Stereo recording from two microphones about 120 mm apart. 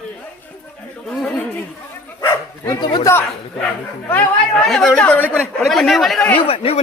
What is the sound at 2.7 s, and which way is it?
Speech, 35° left (ahead or behind).